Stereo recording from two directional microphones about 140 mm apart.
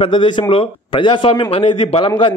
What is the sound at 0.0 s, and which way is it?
A man's voice, 35° left (ahead or behind).